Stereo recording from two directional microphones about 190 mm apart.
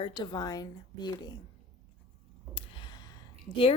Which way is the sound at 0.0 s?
25° left (ahead or behind).